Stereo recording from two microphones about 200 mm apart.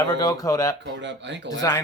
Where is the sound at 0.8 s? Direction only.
65° right (ahead or behind).